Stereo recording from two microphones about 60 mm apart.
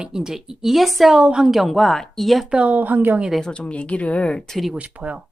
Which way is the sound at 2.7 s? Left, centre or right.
Right.